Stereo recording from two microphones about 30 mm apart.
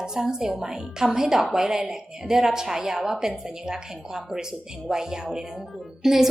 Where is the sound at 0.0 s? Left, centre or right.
Right.